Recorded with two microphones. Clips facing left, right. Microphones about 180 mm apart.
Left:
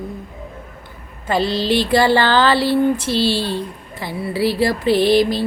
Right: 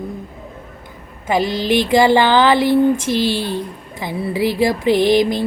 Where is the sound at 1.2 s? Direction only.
15° right (ahead or behind).